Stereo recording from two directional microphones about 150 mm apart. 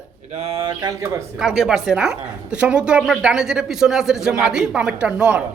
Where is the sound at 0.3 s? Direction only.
40° right (ahead or behind); by 1.2 s 20° right (ahead or behind).